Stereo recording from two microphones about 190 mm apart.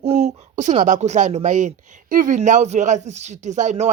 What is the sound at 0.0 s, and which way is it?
A woman's voice, 35° right (ahead or behind).